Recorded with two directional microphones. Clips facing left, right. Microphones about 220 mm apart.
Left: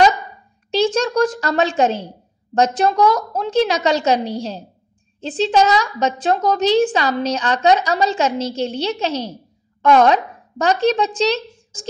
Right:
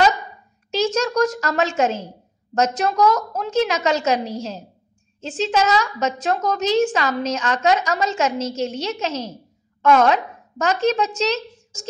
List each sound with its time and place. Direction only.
0.7 s a woman's voice: 30° left (ahead or behind)